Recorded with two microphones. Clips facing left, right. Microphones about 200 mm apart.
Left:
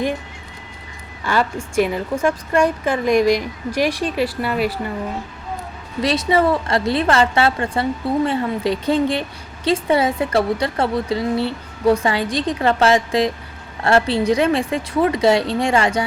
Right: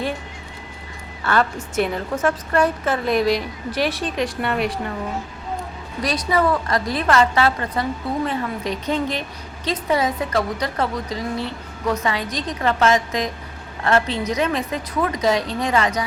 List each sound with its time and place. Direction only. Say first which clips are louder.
1.2 s a woman's voice: even; 10° left (ahead or behind)
6.0 s a woman's voice: left 3 dB; 25° left (ahead or behind)